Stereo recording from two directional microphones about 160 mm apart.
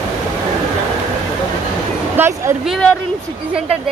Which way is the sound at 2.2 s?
15° right (ahead or behind).